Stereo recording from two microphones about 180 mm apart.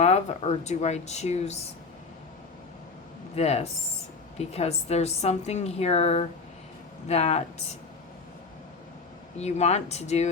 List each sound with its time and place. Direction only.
0.0 s a woman's voice: 40° left (ahead or behind)
3.3 s a woman's voice: 35° left (ahead or behind)
9.4 s a woman's voice: 40° left (ahead or behind)